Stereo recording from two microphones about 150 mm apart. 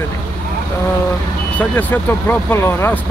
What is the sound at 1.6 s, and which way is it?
Speech, 10° left (ahead or behind).